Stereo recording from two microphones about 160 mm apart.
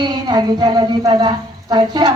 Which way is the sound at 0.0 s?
25° right (ahead or behind).